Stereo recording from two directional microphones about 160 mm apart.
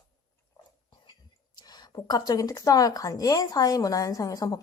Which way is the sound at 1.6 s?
25° left (ahead or behind).